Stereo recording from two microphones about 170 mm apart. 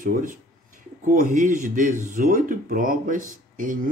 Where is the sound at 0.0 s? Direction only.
55° right (ahead or behind).